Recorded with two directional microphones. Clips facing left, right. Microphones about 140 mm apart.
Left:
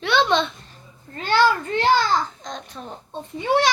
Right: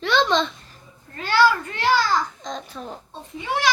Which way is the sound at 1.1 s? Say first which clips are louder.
Even; 25° left (ahead or behind).